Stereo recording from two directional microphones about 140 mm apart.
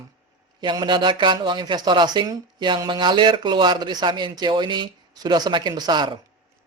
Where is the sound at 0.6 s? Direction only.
35° right (ahead or behind).